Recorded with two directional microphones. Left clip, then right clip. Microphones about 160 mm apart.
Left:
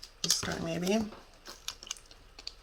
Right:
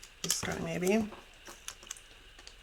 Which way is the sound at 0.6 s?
15° right (ahead or behind).